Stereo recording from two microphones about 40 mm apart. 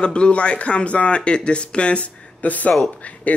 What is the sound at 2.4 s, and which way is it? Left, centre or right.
Speech, left.